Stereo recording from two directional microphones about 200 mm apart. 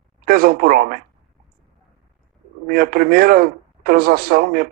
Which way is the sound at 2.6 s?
45° right (ahead or behind).